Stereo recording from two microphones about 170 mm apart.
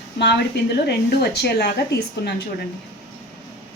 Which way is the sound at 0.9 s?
75° left (ahead or behind).